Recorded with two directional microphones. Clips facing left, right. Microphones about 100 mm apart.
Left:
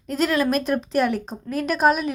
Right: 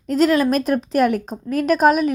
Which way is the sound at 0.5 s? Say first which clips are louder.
Right 3 dB; 40° right (ahead or behind).